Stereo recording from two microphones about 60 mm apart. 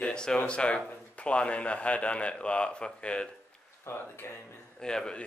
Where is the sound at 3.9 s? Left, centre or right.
Left.